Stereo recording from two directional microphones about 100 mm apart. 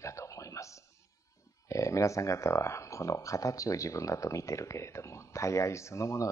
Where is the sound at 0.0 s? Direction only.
30° left (ahead or behind).